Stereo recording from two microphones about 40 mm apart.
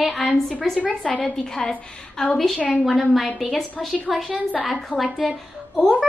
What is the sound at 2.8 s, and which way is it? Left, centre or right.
A child's voice, centre.